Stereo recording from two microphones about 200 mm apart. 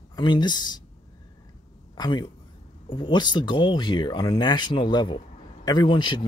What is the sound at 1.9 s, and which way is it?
A man's voice, 20° left (ahead or behind).